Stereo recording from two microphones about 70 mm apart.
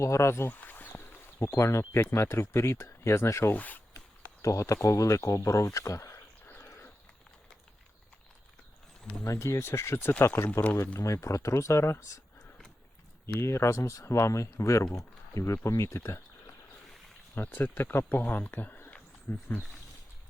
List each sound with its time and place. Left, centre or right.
0.0 s speech: left
0.5 s a sound: left
1.4 s speech: left
3.5 s speech: left
4.4 s speech: left
6.7 s dog: left
9.2 s speech: left
11.0 s speech: left
13.2 s speech: left
17.3 s speech: left